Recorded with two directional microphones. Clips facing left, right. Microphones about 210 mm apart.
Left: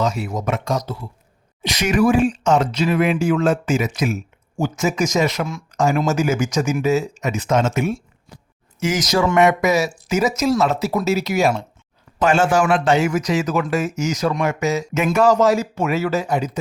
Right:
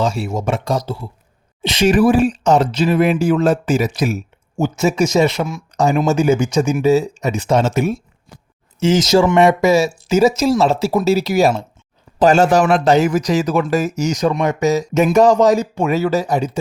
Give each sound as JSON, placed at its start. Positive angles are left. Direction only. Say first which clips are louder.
{"t": 0.0, "sound": "speech", "louder": "right 3 dB", "side_deg": -30}
{"t": 8.8, "sound": "speech", "louder": "right 6 dB", "side_deg": -25}